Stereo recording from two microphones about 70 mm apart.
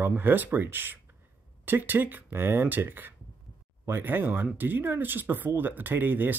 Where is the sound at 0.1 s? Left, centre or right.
Right.